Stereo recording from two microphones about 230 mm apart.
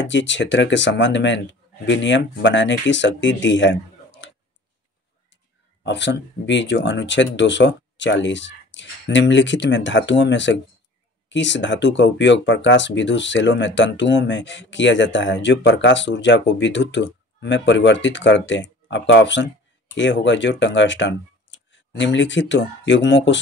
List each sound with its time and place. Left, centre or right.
0.0 s speech: left
5.9 s speech: left